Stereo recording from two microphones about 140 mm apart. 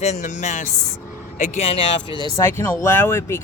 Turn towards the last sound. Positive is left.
turn(degrees=15)  # may be behind; listen again after turning